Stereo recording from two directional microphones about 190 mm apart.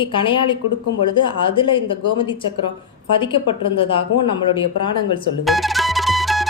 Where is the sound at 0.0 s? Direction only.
25° left (ahead or behind).